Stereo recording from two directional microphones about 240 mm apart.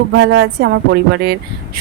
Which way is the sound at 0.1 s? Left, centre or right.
Right.